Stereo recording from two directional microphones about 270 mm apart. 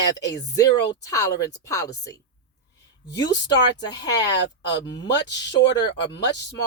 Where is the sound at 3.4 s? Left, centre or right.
Centre.